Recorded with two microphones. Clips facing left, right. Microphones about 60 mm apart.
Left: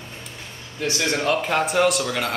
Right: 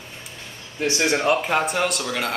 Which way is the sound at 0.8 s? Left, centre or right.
Right.